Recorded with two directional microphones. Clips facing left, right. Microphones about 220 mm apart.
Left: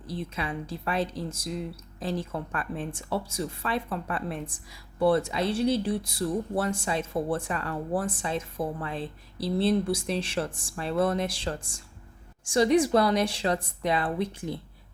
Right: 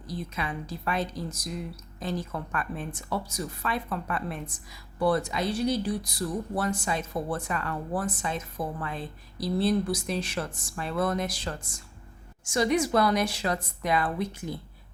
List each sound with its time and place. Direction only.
0.1 s speech: 30° left (ahead or behind)